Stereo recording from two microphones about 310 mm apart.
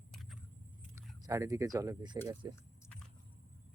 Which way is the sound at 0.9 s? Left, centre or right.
Centre.